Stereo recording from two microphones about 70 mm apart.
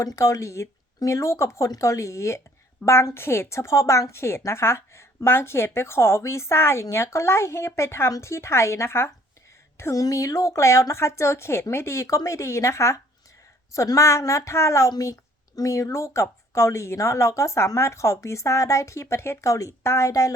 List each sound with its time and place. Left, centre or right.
0.0 s a woman's voice: left
9.9 s speech: left